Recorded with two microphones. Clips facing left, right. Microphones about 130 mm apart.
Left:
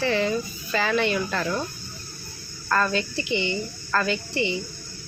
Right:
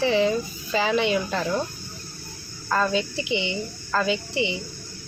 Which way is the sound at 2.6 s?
15° right (ahead or behind).